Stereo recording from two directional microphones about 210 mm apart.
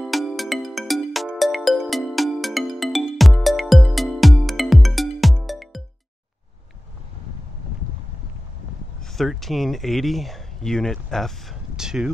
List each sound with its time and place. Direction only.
0.0 s music: centre (ahead or behind)
9.0 s speech: centre (ahead or behind)